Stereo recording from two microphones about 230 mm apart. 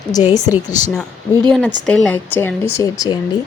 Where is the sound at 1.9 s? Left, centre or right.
Centre.